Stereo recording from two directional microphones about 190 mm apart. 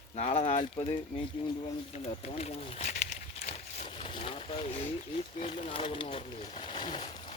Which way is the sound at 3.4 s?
30° left (ahead or behind).